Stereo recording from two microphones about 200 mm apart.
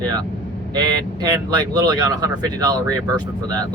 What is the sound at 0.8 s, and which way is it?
Speech, 20° right (ahead or behind).